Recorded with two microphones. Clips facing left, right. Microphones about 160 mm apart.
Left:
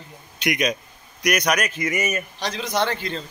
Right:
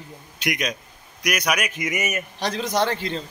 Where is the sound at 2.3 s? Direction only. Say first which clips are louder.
Right 4 dB; 50° right (ahead or behind); by 3.1 s 35° right (ahead or behind).